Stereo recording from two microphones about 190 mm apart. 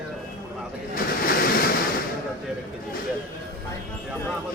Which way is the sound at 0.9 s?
50° left (ahead or behind).